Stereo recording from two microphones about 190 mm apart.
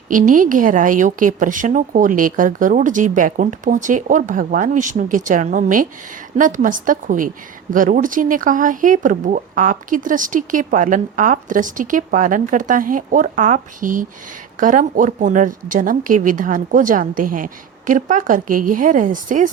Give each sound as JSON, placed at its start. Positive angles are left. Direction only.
{"t": 0.1, "sound": "speech", "side_deg": -45}